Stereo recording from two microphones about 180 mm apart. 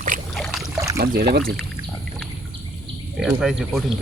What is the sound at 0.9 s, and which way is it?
Speech, 60° right (ahead or behind).